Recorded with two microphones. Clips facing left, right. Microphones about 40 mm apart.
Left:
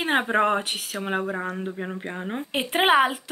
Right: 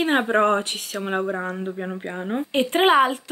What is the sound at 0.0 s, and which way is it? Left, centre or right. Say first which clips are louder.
Speech: right 3 dB; centre.